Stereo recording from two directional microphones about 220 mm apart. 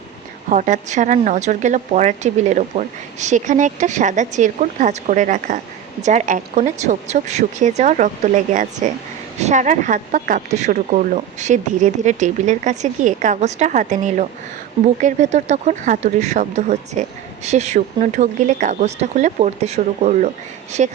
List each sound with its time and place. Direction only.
0.5 s speech: 35° right (ahead or behind)